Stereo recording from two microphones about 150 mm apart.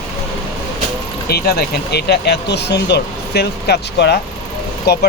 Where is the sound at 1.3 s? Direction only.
90° left.